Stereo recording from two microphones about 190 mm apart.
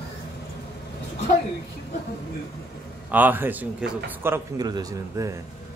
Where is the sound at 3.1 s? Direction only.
10° right (ahead or behind).